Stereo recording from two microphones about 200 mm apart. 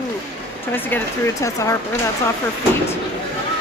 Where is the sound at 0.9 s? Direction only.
10° left (ahead or behind).